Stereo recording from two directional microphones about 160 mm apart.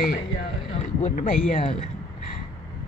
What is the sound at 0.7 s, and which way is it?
Speech, 50° left (ahead or behind).